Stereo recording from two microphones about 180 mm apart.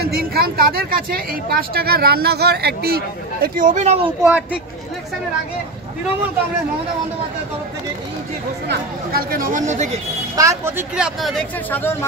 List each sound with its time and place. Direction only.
0.0 s speech: 60° right (ahead or behind)
3.4 s speech: 50° right (ahead or behind)
4.2 s speech: 5° right (ahead or behind)
8.6 s speech: 55° right (ahead or behind)
10.3 s speech: 20° right (ahead or behind)
11.1 s speech: centre (ahead or behind)
11.7 s speech: 10° left (ahead or behind)